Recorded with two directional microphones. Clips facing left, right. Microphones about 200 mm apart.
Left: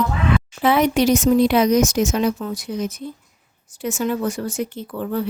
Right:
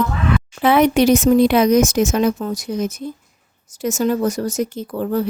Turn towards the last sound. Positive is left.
turn(degrees=-40)  # may be behind; listen again after turning